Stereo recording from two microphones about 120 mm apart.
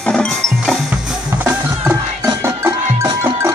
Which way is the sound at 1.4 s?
15° right (ahead or behind).